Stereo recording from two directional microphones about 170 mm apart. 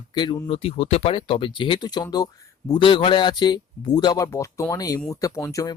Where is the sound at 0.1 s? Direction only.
25° left (ahead or behind).